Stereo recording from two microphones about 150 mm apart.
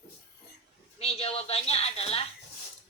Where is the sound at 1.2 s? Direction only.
40° left (ahead or behind).